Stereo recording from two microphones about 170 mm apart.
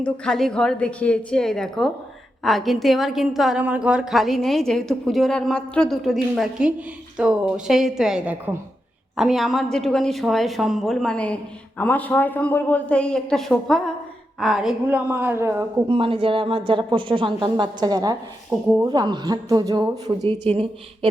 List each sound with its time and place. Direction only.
0.0 s a woman's voice: 5° left (ahead or behind); by 15.6 s 15° right (ahead or behind)
15.9 s speech: 30° right (ahead or behind)